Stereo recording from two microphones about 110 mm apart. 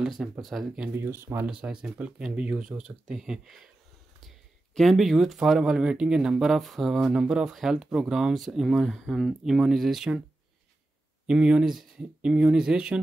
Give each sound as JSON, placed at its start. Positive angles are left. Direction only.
{"t": 0.0, "sound": "speech", "side_deg": 0}
{"t": 0.9, "sound": "speech", "side_deg": -20}
{"t": 1.5, "sound": "speech", "side_deg": -10}
{"t": 4.7, "sound": "speech", "side_deg": 0}
{"t": 11.2, "sound": "speech", "side_deg": -10}